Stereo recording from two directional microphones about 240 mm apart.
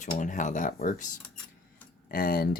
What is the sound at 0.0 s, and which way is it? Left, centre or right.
Speech, left.